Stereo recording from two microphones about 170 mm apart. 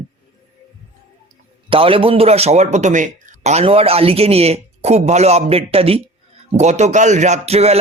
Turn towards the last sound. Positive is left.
turn(degrees=-40)  # may be behind; listen again after turning